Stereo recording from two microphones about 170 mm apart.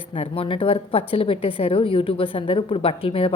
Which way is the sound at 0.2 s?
30° left (ahead or behind).